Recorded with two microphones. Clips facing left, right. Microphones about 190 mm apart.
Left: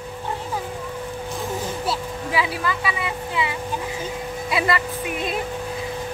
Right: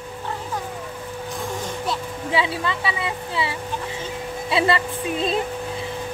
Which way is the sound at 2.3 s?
25° right (ahead or behind).